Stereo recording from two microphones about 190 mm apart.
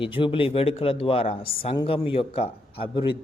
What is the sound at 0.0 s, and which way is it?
Speech, 25° left (ahead or behind).